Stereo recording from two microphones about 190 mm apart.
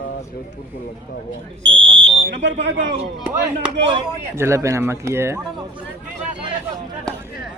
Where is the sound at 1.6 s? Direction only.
75° right (ahead or behind).